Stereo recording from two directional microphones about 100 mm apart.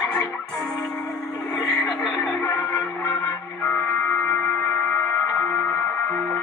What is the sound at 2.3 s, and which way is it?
Music, 30° left (ahead or behind).